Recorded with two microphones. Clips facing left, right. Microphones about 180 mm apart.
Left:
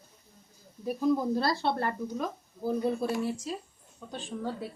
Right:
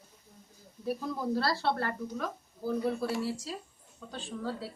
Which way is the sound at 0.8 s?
20° left (ahead or behind).